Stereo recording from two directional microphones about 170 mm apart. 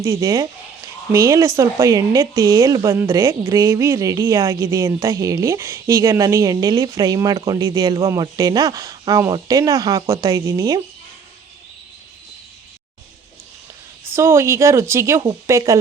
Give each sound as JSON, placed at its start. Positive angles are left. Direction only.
{"t": 0.0, "sound": "speech", "side_deg": -20}
{"t": 14.1, "sound": "speech", "side_deg": -15}